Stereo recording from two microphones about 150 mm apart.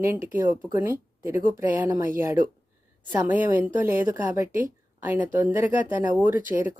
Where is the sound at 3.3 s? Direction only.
10° right (ahead or behind).